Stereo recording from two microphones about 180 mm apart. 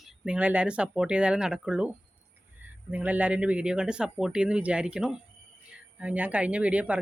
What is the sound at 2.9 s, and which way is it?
Speech, 10° right (ahead or behind).